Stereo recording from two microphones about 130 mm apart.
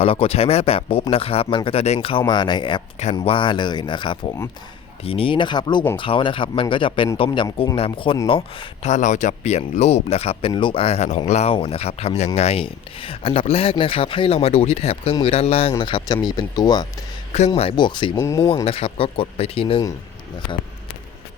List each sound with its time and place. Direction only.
0.0 s speech: 45° left (ahead or behind)
10.5 s speech: 40° left (ahead or behind)
15.8 s speech: 40° left (ahead or behind)
17.3 s speech: 50° left (ahead or behind); by 18.2 s 35° left (ahead or behind)
18.2 s speech: 25° left (ahead or behind)
18.4 s speech: 45° left (ahead or behind)